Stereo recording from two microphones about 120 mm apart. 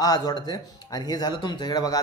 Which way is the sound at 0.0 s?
35° left (ahead or behind).